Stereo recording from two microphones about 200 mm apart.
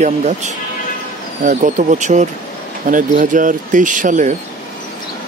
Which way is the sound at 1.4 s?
40° right (ahead or behind).